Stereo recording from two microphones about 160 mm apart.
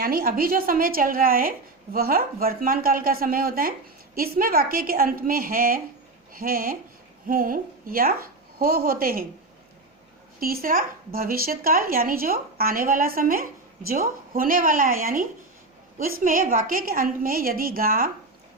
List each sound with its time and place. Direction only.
0.0 s a woman's voice: 65° right (ahead or behind)
10.4 s a woman's voice: 65° right (ahead or behind)